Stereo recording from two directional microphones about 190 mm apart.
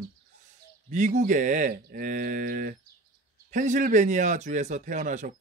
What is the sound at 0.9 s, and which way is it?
Speech, 40° right (ahead or behind).